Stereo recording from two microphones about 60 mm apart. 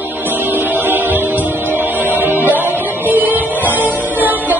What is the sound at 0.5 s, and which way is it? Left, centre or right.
Music, right.